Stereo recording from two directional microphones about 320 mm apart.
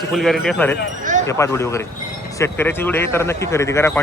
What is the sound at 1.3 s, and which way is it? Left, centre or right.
A man's voice, centre.